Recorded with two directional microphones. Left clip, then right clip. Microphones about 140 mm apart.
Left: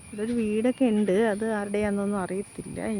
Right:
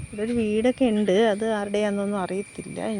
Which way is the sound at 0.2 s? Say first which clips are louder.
Right 3 dB; 5° right (ahead or behind).